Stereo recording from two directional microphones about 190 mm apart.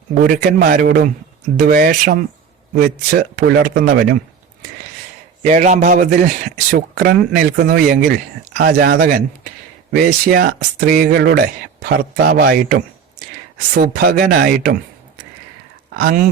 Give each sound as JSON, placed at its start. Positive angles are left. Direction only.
{"t": 0.1, "sound": "a man's voice", "side_deg": -45}
{"t": 5.4, "sound": "a man's voice", "side_deg": -40}
{"t": 16.0, "sound": "a man's voice", "side_deg": -50}